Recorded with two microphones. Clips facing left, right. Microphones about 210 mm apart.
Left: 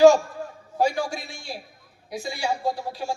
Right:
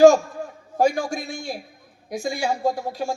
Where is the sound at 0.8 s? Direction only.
45° right (ahead or behind).